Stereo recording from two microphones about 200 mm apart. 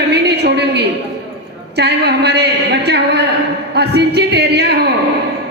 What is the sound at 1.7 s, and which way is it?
A woman's voice, 55° right (ahead or behind).